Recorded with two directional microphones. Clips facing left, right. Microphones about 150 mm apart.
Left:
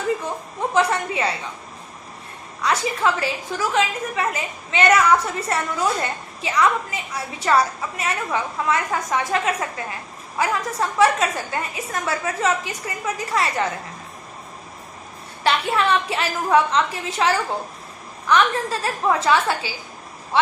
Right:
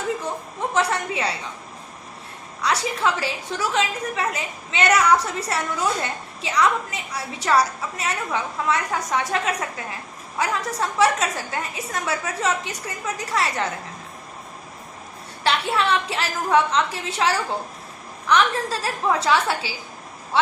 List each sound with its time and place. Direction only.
0.7 s a woman's voice: centre (ahead or behind)
2.6 s a woman's voice: centre (ahead or behind)
15.4 s a woman's voice: centre (ahead or behind)